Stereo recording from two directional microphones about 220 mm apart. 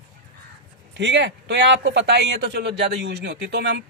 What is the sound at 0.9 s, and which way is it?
A man's voice, 55° right (ahead or behind).